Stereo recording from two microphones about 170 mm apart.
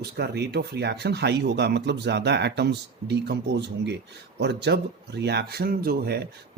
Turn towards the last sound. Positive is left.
turn(degrees=-65)  # may be behind; listen again after turning